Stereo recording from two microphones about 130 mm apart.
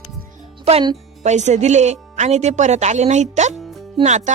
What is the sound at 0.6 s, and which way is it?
Speech, 50° right (ahead or behind).